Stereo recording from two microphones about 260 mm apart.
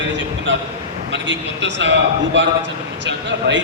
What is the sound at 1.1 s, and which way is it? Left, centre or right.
Speech, right.